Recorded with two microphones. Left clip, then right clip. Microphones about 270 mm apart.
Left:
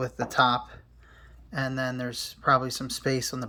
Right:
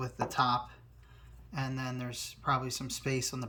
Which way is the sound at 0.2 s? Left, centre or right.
Centre.